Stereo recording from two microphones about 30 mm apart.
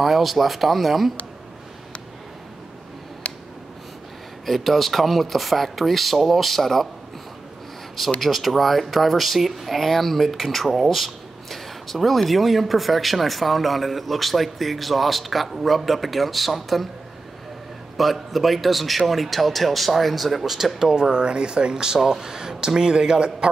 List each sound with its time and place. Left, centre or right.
0.0 s speech: centre
3.3 s a sound: left
4.6 s speech: centre
8.2 s speech: centre
17.9 s speech: centre
20.4 s speech: centre
20.8 s speech: right